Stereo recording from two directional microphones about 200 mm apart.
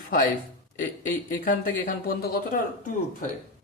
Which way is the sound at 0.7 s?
40° left (ahead or behind).